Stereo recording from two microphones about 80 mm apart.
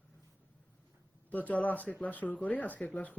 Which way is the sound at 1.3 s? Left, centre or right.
Centre.